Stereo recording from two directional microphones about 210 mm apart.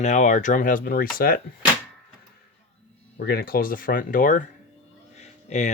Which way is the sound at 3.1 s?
45° left (ahead or behind).